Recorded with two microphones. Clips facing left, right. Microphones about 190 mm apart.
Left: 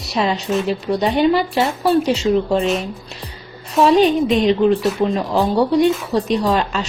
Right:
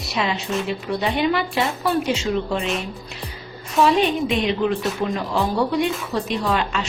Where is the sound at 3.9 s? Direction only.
35° left (ahead or behind).